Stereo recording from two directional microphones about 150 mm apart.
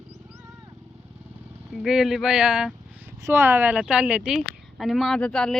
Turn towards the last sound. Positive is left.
turn(degrees=5)  # may be behind; listen again after turning